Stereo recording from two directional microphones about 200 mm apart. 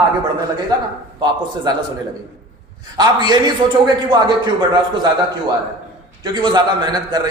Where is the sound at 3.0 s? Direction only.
20° right (ahead or behind).